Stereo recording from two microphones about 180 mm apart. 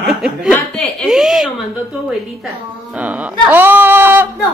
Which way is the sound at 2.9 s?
10° right (ahead or behind).